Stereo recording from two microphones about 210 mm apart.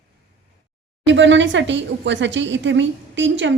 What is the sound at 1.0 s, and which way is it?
Speech, 60° right (ahead or behind).